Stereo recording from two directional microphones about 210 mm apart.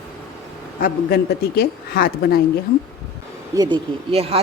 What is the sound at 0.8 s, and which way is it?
Speech, 45° left (ahead or behind).